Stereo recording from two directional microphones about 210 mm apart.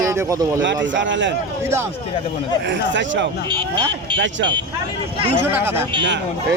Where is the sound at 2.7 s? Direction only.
60° right (ahead or behind).